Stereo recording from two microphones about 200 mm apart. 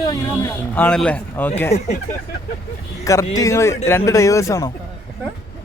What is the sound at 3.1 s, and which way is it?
Speech, 15° left (ahead or behind).